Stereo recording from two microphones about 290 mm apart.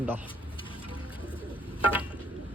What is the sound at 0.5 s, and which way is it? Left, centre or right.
Music, centre.